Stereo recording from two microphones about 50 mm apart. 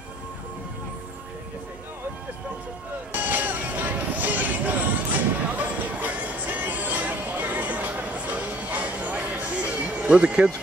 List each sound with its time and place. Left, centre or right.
3.1 s music: right